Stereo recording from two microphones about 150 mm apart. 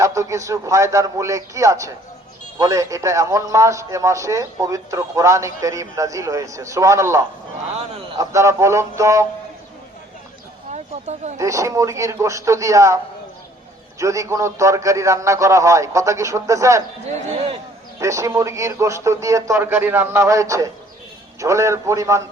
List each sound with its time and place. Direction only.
0.0 s a man's voice: 20° right (ahead or behind)
10.7 s speech: 50° right (ahead or behind)
11.3 s a man's voice: 20° right (ahead or behind)
14.0 s a man's voice: 20° right (ahead or behind)
17.3 s a man's voice: 40° right (ahead or behind)
18.0 s a man's voice: 20° right (ahead or behind)